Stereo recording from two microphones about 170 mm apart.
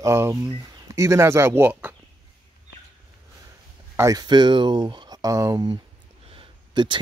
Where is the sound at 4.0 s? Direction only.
20° right (ahead or behind).